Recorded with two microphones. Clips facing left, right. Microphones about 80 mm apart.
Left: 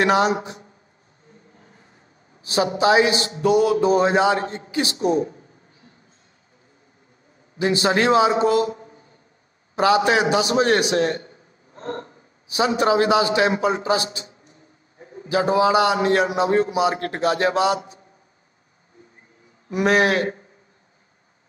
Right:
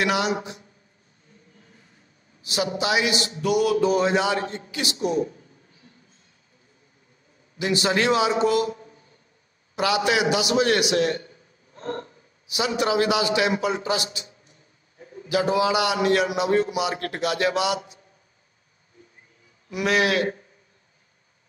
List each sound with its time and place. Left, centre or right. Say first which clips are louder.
0.0 s a man's voice: left 5 dB; left
1.5 s vehicle: left 3 dB; left
2.4 s a man's voice: left 7 dB; left
7.5 s a man's voice: left 3 dB; left
19.7 s a man's voice: left 4 dB; left